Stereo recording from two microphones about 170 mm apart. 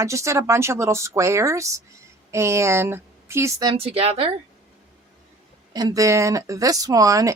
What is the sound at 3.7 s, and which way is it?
Speech, 35° right (ahead or behind).